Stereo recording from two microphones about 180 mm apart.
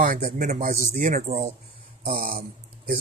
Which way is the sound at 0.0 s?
50° right (ahead or behind).